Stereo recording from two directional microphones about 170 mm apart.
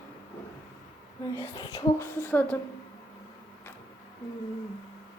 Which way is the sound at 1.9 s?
15° left (ahead or behind).